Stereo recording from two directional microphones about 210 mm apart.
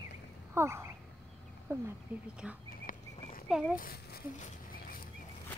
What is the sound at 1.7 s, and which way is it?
Speech, 10° right (ahead or behind).